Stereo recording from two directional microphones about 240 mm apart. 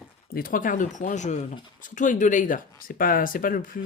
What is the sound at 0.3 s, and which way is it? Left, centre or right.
Speech, left.